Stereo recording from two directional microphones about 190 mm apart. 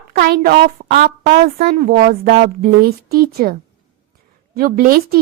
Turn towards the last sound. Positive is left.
turn(degrees=-50)  # may be behind; listen again after turning